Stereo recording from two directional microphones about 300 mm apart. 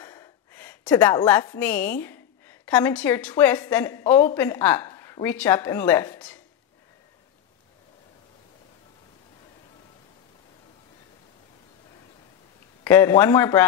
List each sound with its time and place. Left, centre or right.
0.0 s a woman's voice: centre
12.8 s speech: centre